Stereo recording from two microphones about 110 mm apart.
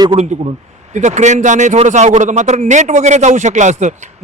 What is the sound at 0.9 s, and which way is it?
A man's voice, 90° right.